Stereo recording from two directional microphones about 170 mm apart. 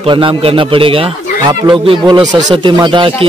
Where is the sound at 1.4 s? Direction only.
20° right (ahead or behind).